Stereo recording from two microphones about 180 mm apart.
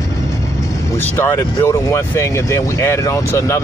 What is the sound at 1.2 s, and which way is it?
Speech, 15° left (ahead or behind).